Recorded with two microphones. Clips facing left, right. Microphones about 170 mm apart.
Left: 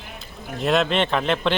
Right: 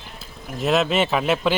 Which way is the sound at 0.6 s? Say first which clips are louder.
Right 1 dB; 5° right (ahead or behind).